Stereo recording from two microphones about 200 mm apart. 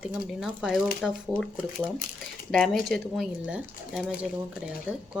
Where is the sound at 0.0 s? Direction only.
5° right (ahead or behind).